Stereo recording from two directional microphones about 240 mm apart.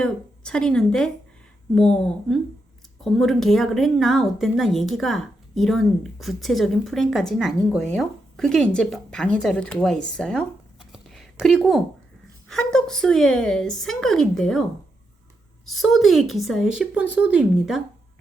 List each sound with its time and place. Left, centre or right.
0.0 s a woman's voice: centre
10.1 s a sound: centre
12.5 s a woman's voice: centre